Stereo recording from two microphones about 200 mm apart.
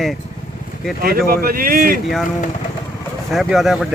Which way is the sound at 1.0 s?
50° right (ahead or behind).